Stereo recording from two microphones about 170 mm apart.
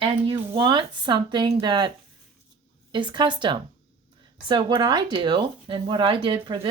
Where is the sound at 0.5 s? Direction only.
30° right (ahead or behind).